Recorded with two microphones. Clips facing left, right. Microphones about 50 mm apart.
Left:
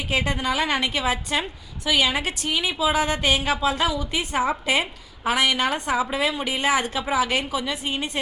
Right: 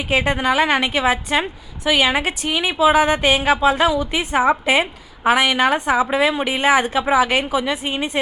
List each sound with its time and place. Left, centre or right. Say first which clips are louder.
0.1 s a woman's voice: right 6 dB; right